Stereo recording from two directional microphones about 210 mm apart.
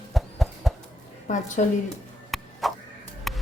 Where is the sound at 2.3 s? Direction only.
Centre (ahead or behind).